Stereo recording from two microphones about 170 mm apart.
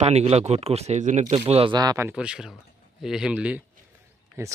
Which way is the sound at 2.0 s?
5° right (ahead or behind).